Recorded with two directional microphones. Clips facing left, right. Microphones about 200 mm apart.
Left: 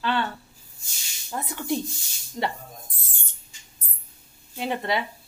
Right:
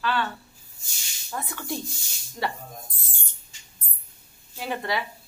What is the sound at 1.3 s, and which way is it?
Speech, 20° left (ahead or behind).